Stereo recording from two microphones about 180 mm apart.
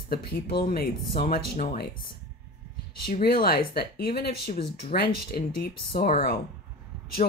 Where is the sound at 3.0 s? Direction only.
55° left (ahead or behind).